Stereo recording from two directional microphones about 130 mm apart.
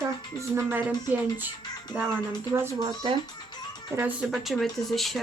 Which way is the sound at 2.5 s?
25° right (ahead or behind).